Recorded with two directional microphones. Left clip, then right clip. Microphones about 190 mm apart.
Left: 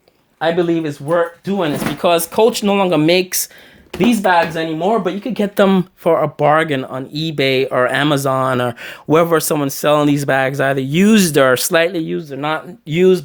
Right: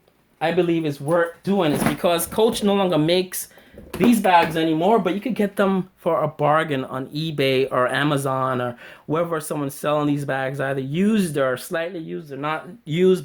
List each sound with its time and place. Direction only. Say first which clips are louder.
0.4 s speech: left 4 dB; 20° left (ahead or behind)
2.0 s speech: left 9 dB; 25° left (ahead or behind)
4.4 s speech: left 2 dB; 15° left (ahead or behind)
5.4 s speech: left 8 dB; 40° left (ahead or behind)